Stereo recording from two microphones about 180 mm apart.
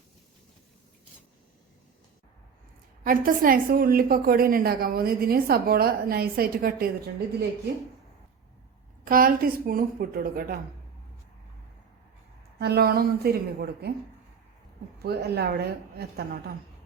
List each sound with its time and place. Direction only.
3.0 s a woman's voice: 50° right (ahead or behind)
9.0 s speech: 50° right (ahead or behind)
12.5 s a woman's voice: 60° right (ahead or behind)
14.9 s a woman's voice: 60° right (ahead or behind)